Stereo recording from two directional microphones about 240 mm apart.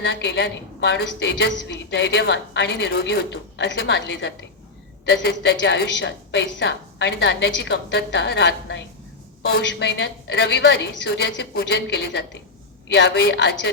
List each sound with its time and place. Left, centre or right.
0.0 s a woman's voice: left